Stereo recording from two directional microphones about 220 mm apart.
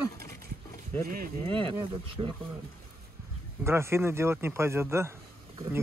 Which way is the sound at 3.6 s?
10° right (ahead or behind).